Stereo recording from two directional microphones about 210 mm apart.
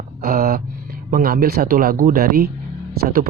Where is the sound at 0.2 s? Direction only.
45° right (ahead or behind).